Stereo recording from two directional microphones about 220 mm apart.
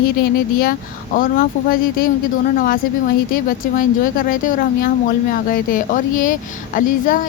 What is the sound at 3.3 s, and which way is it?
A woman's voice, 40° left (ahead or behind).